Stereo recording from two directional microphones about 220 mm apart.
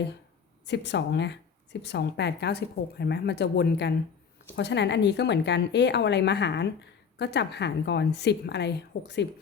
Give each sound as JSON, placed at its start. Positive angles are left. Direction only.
{"t": 0.7, "sound": "speech", "side_deg": 50}